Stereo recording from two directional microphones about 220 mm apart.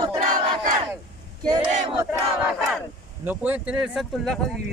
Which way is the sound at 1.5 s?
20° right (ahead or behind).